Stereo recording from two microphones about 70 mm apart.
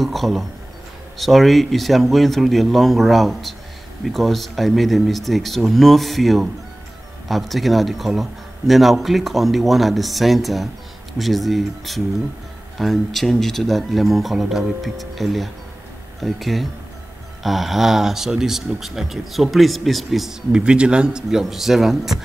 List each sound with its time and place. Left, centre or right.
0.0 s speech: centre